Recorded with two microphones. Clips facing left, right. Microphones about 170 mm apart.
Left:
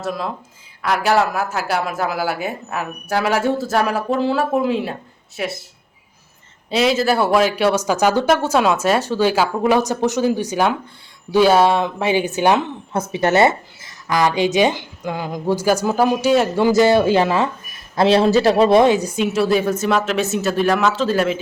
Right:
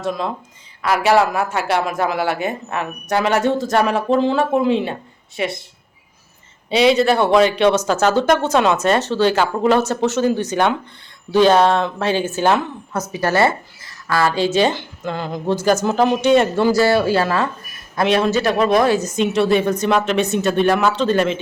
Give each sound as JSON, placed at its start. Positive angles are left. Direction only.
{"t": 0.0, "sound": "speech", "side_deg": 5}
{"t": 6.7, "sound": "speech", "side_deg": 0}
{"t": 17.9, "sound": "speech", "side_deg": 30}